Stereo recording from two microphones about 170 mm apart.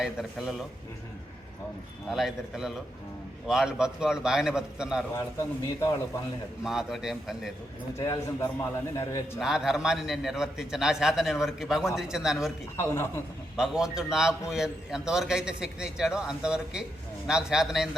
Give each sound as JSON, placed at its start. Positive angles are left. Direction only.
{"t": 0.0, "sound": "a man's voice", "side_deg": -5}
{"t": 2.0, "sound": "a man's voice", "side_deg": 0}
{"t": 5.1, "sound": "a man's voice", "side_deg": 15}
{"t": 6.7, "sound": "a man's voice", "side_deg": -5}
{"t": 7.9, "sound": "a man's voice", "side_deg": 15}
{"t": 9.4, "sound": "a man's voice", "side_deg": -5}
{"t": 12.7, "sound": "a man's voice", "side_deg": 15}
{"t": 13.6, "sound": "a man's voice", "side_deg": -5}